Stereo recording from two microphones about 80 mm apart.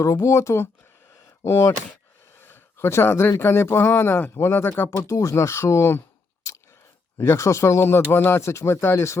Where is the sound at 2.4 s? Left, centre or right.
Left.